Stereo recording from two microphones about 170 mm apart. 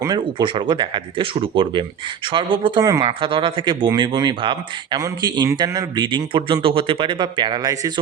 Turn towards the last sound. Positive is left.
turn(degrees=-20)  # may be behind; listen again after turning